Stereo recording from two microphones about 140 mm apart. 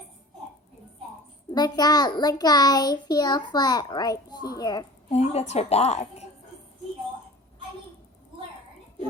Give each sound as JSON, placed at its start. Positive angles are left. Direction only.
{"t": 1.5, "sound": "a child's voice", "side_deg": 30}
{"t": 5.1, "sound": "a woman's voice", "side_deg": 50}